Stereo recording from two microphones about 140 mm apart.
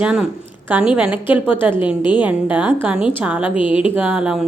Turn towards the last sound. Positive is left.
turn(degrees=-5)  # may be behind; listen again after turning